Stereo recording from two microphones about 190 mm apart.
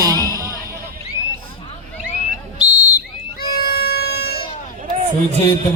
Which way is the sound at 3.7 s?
55° left (ahead or behind).